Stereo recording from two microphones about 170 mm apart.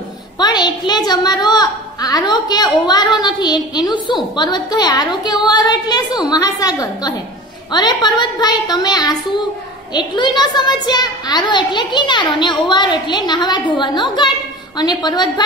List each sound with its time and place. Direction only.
0.4 s a woman's voice: 25° left (ahead or behind)